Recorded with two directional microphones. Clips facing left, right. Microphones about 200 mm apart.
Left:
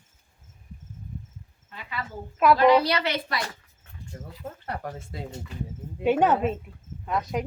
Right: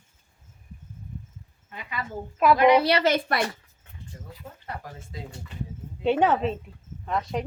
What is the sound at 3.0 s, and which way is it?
Speech, 45° right (ahead or behind).